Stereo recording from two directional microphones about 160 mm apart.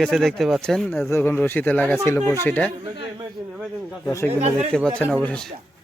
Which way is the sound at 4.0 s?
15° left (ahead or behind).